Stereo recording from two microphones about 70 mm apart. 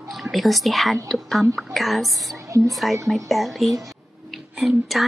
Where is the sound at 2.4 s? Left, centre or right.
Right.